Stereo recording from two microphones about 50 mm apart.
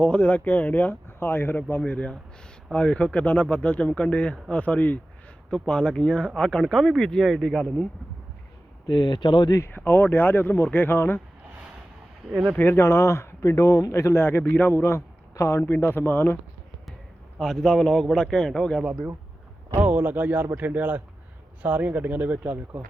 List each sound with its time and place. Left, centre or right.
0.0 s speech: left
1.5 s speech: left
5.5 s a man's voice: centre
9.7 s speech: left
12.3 s speech: centre
12.5 s speech: left
15.6 s speech: left
17.4 s a man's voice: centre
19.7 s speech: right